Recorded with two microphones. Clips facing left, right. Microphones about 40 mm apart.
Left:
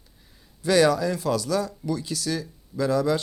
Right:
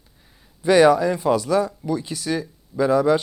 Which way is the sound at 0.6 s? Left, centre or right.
Right.